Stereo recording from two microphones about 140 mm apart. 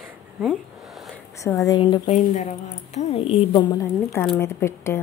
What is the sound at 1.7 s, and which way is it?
Speech, 30° left (ahead or behind).